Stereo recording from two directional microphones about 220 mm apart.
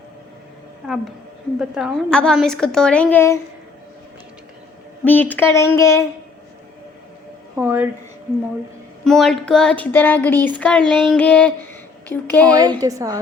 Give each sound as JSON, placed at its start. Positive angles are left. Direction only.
{"t": 1.5, "sound": "speech", "side_deg": 0}
{"t": 5.0, "sound": "speech", "side_deg": 10}
{"t": 7.5, "sound": "a woman's voice", "side_deg": -10}
{"t": 9.0, "sound": "speech", "side_deg": 0}
{"t": 12.5, "sound": "a woman's voice", "side_deg": -15}